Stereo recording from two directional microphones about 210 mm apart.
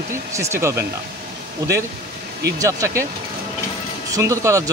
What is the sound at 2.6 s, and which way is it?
Speech, 15° right (ahead or behind).